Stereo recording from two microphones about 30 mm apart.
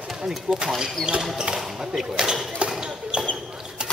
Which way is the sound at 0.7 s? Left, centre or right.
Right.